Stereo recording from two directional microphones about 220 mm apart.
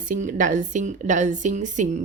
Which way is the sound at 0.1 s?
35° right (ahead or behind).